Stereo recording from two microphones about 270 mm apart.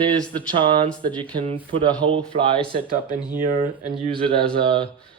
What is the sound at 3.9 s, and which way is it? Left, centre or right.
Speech, centre.